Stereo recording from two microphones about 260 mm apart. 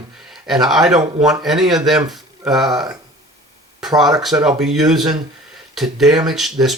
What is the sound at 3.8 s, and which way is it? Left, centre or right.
Speech, centre.